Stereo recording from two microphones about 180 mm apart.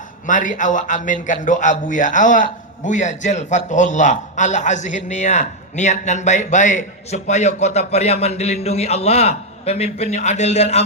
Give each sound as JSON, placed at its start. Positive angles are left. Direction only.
{"t": 0.3, "sound": "a man's voice", "side_deg": 45}